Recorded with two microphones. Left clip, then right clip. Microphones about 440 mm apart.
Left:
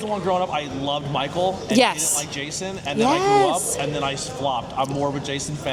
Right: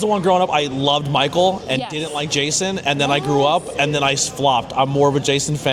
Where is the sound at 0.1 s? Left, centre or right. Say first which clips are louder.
Right 5 dB; right.